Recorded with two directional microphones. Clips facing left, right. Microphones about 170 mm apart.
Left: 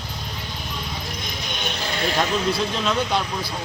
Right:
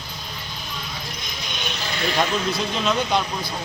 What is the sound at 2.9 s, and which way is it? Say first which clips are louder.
Speech: right 3 dB; centre (ahead or behind).